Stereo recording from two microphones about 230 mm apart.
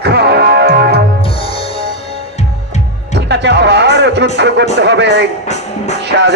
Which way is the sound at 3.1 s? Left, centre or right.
Right.